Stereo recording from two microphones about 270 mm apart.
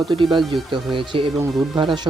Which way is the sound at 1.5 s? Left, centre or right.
Centre.